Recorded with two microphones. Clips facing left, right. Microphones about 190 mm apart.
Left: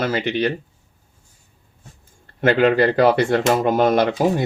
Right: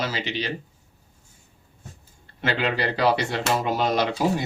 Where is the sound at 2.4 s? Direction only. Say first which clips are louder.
Left 10 dB; 50° left (ahead or behind).